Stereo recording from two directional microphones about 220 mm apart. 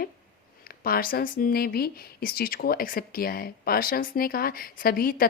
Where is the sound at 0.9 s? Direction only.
40° left (ahead or behind).